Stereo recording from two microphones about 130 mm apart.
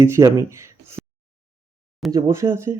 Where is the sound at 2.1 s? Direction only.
20° right (ahead or behind).